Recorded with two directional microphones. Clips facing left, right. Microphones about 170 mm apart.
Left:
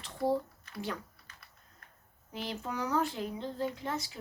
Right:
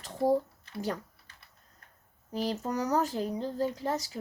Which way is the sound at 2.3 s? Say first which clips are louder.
Right 6 dB; 40° right (ahead or behind).